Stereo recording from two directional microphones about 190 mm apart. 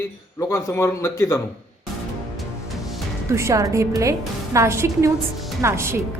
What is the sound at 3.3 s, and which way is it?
A woman's voice, 15° right (ahead or behind).